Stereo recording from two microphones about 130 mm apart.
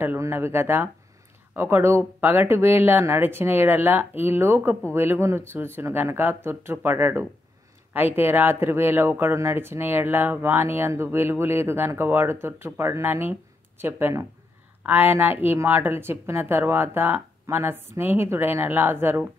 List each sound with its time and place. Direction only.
0.0 s speech: 20° right (ahead or behind)